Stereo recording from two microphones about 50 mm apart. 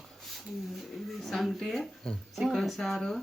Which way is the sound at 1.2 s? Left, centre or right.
Centre.